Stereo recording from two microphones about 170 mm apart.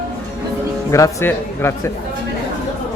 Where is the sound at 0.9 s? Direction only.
20° left (ahead or behind).